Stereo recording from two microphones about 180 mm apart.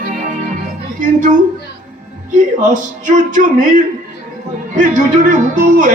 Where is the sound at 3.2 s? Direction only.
45° right (ahead or behind).